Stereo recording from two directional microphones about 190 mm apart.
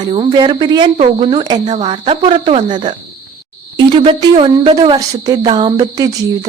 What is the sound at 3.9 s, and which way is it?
A woman's voice, 25° right (ahead or behind).